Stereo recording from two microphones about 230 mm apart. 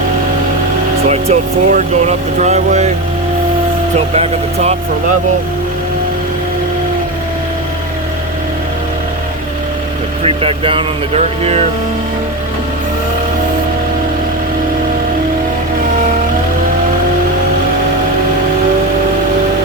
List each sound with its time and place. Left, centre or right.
1.0 s speech: right
10.2 s speech: right